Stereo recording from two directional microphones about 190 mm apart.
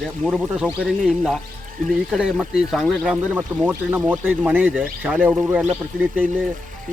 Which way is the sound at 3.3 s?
10° right (ahead or behind).